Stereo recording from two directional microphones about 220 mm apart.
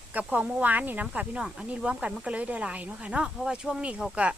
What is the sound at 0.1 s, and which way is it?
Speech, 5° right (ahead or behind).